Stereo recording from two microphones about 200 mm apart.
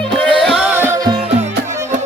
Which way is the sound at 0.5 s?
5° right (ahead or behind).